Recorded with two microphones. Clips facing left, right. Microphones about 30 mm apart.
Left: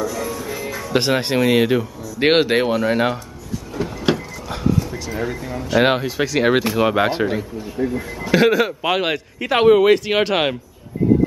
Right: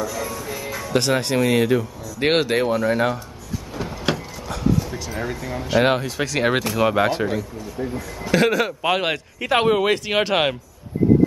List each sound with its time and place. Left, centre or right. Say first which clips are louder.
0.0 s music: left 3 dB; centre
0.9 s speech: left 2 dB; left
3.7 s a sound: left 4 dB; centre
5.5 s speech: left 1 dB; centre
5.8 s speech: left 2 dB; centre; by 7.8 s left
7.8 s speech: left 5 dB; centre